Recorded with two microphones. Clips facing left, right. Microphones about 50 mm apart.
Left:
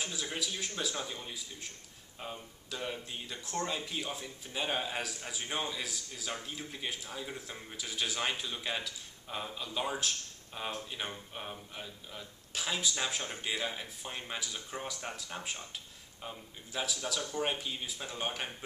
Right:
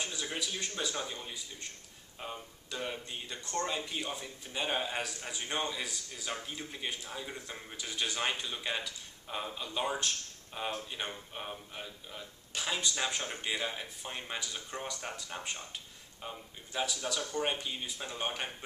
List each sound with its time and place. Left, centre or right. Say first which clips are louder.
0.0 s a man's voice: even; centre